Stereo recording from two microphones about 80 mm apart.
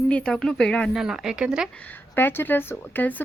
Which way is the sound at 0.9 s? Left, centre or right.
Centre.